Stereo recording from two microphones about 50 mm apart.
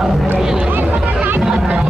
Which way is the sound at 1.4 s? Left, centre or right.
Centre.